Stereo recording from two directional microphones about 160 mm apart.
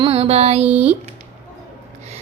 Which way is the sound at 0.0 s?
40° right (ahead or behind).